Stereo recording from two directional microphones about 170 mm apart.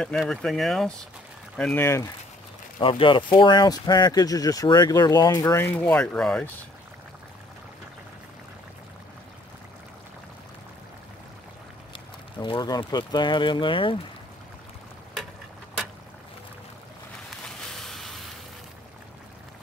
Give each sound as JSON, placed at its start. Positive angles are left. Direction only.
{"t": 0.0, "sound": "speech", "side_deg": 0}
{"t": 2.8, "sound": "speech", "side_deg": 30}
{"t": 12.4, "sound": "speech", "side_deg": 25}
{"t": 17.7, "sound": "a sound", "side_deg": 0}